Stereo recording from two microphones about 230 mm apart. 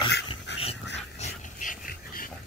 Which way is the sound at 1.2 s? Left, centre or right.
Left.